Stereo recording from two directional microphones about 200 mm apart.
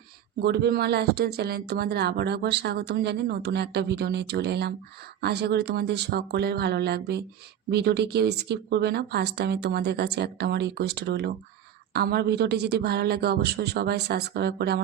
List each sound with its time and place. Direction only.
0.4 s speech: 55° right (ahead or behind)